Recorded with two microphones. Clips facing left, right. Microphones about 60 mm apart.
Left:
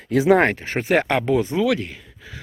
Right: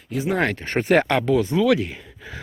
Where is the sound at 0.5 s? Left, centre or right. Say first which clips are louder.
Right 1 dB; centre.